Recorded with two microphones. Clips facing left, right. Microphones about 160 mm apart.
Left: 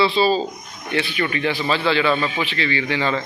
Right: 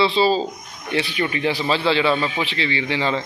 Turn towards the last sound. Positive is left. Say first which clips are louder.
# even
turn(degrees=-25)  # may be behind; listen again after turning